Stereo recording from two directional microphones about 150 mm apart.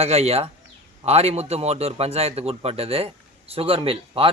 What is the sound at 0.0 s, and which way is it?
A man's voice, 45° right (ahead or behind).